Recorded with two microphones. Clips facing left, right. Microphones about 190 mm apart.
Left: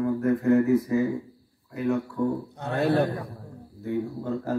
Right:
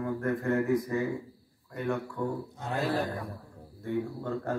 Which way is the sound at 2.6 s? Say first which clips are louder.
Left 7 dB; 65° left (ahead or behind).